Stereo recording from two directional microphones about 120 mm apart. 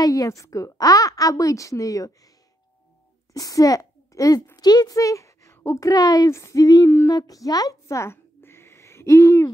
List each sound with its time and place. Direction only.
0.0 s a woman's voice: 30° left (ahead or behind)
3.3 s a child's voice: 30° left (ahead or behind)
7.2 s a sound: 30° left (ahead or behind)